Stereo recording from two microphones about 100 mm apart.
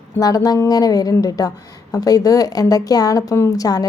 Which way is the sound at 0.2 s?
40° left (ahead or behind).